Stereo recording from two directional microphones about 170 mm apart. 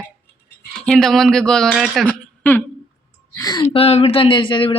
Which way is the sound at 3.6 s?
40° left (ahead or behind).